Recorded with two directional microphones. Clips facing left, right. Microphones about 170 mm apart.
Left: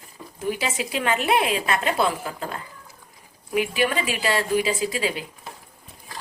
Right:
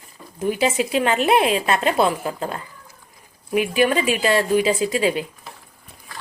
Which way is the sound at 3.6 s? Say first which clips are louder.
Right 4 dB; 20° right (ahead or behind).